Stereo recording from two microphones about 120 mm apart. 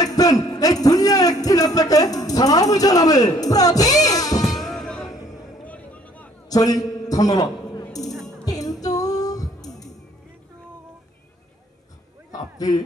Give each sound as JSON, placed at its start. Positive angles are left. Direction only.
{"t": 0.0, "sound": "a sound", "side_deg": 30}
{"t": 3.3, "sound": "music", "side_deg": 30}
{"t": 4.5, "sound": "music", "side_deg": 0}
{"t": 5.7, "sound": "vehicle", "side_deg": 10}
{"t": 6.5, "sound": "a sound", "side_deg": 30}
{"t": 8.5, "sound": "music", "side_deg": 30}
{"t": 12.5, "sound": "speech", "side_deg": 30}